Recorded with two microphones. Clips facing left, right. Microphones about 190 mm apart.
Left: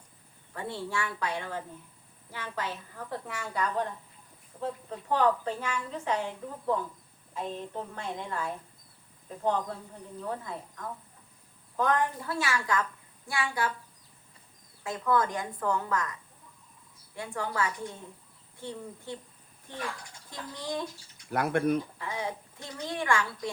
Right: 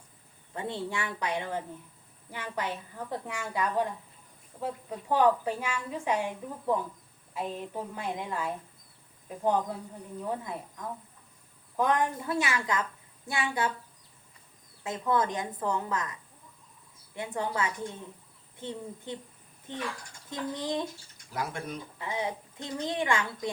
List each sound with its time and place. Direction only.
0.5 s a woman's voice: 20° right (ahead or behind)
14.8 s a woman's voice: 20° right (ahead or behind)
17.2 s a woman's voice: 20° right (ahead or behind)
21.2 s speech: 60° left (ahead or behind)
21.9 s a woman's voice: 20° right (ahead or behind)